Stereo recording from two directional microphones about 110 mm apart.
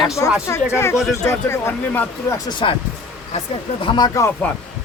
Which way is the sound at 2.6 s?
50° left (ahead or behind).